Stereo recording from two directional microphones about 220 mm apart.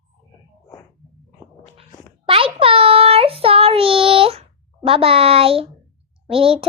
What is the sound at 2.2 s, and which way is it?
Child singing, 25° right (ahead or behind).